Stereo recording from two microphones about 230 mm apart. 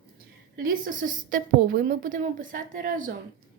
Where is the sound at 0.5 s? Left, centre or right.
Right.